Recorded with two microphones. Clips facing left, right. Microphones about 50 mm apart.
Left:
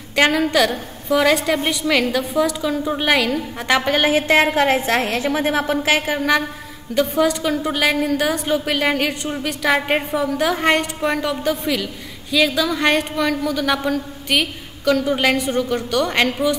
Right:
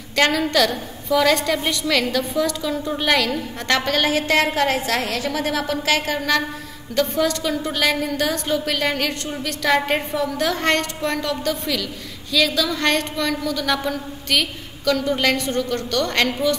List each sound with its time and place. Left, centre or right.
0.1 s a woman's voice: centre